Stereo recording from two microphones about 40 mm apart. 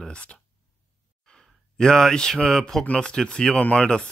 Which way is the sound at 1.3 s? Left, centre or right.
Centre.